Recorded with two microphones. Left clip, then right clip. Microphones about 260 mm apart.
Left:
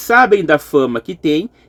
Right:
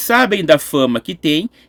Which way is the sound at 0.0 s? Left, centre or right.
Right.